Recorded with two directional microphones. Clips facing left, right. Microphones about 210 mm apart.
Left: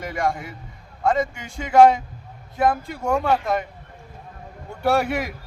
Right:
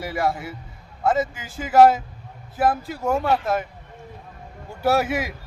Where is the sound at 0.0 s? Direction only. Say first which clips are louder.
Right 1 dB; 5° right (ahead or behind).